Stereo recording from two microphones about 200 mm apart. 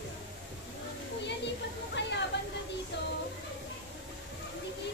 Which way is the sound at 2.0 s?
60° left (ahead or behind).